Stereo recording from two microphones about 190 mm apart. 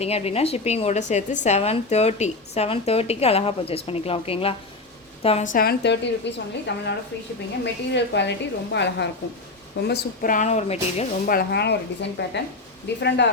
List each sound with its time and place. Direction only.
0.0 s a woman's voice: 35° left (ahead or behind); by 9.0 s 65° left (ahead or behind)
9.8 s a woman's voice: 55° left (ahead or behind); by 11.0 s 35° left (ahead or behind)
11.3 s a woman's voice: 55° left (ahead or behind)